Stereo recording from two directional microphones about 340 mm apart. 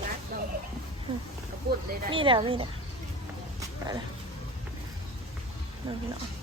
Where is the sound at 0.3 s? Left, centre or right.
Right.